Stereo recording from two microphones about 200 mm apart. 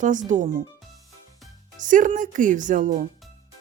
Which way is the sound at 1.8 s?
40° right (ahead or behind).